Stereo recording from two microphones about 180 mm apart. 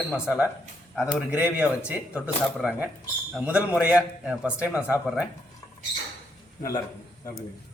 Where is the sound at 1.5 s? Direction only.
10° right (ahead or behind).